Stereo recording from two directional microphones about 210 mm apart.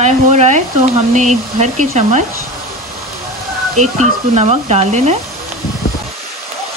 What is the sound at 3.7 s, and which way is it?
Speech, 35° right (ahead or behind).